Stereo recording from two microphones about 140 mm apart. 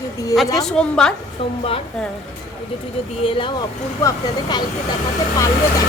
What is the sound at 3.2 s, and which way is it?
Speech, 40° left (ahead or behind).